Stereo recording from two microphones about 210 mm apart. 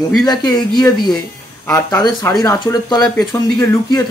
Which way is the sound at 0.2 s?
20° left (ahead or behind).